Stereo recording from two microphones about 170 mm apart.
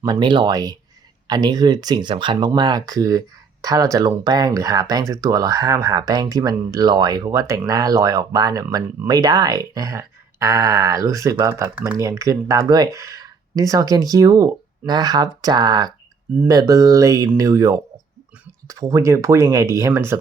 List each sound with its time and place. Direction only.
0.0 s speech: 25° right (ahead or behind)